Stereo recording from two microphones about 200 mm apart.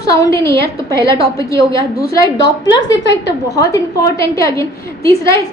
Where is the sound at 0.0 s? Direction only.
15° left (ahead or behind).